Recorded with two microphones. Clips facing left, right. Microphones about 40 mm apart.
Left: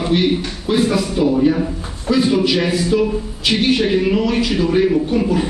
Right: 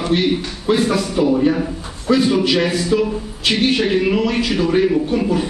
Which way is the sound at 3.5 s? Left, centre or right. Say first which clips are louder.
Left 1 dB; centre.